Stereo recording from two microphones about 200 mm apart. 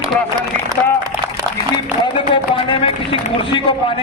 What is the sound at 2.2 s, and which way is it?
A man's voice, 25° left (ahead or behind).